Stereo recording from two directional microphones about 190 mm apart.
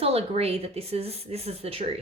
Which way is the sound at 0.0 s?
35° right (ahead or behind).